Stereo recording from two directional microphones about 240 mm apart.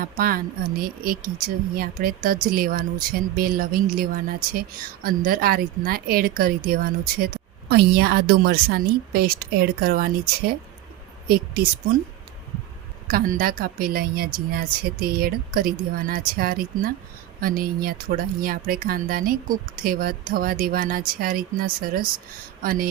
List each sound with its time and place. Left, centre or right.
0.0 s a woman's voice: right
11.3 s a woman's voice: right
13.1 s a woman's voice: right